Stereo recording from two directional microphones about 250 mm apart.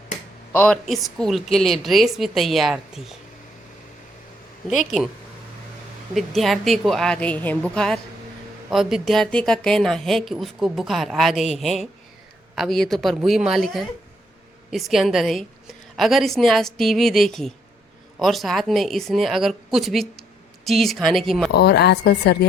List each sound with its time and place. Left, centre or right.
0.5 s a woman's voice: centre
4.7 s a woman's voice: centre
6.1 s a woman's voice: centre
21.5 s speech: left